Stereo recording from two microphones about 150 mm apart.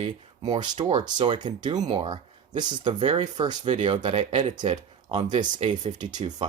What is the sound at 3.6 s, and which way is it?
Speech, 50° right (ahead or behind).